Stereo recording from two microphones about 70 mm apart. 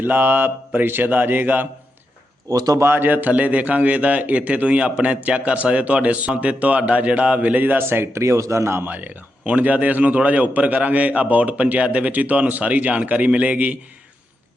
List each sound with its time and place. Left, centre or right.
0.0 s a man's voice: right
2.5 s speech: right
2.7 s a man's voice: right
8.9 s a man's voice: right